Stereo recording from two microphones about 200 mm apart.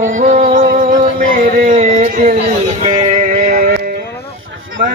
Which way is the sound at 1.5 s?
40° right (ahead or behind).